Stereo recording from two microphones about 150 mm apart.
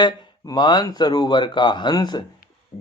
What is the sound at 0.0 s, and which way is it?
Speech, 30° left (ahead or behind).